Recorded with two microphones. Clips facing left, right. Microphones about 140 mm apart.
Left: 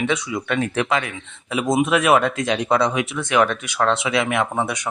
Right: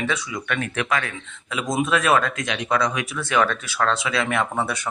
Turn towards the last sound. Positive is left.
turn(degrees=15)  # may be behind; listen again after turning